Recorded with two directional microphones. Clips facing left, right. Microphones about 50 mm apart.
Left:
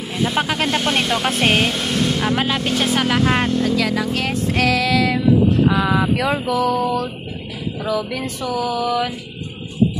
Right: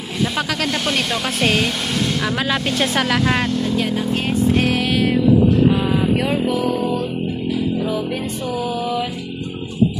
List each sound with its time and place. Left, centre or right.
1.2 s speech: left
2.5 s speech: centre
3.3 s speech: centre
3.6 s speech: left
5.7 s music: left
8.5 s music: left